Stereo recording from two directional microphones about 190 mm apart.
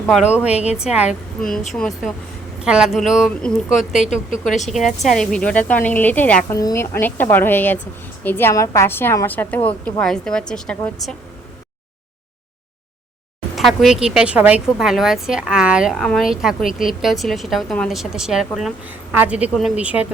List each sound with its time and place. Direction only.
0.5 s a woman's voice: 35° left (ahead or behind)
0.9 s a woman's voice: 5° right (ahead or behind)
13.6 s a woman's voice: centre (ahead or behind)